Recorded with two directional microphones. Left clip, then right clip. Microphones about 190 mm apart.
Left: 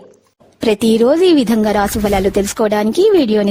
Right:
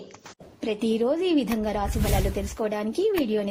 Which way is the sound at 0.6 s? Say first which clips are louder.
Left 13 dB; 70° left (ahead or behind).